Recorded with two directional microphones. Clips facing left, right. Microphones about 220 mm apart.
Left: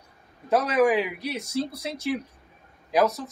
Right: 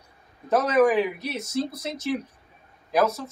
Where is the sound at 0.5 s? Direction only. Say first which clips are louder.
Right 1 dB; 15° left (ahead or behind).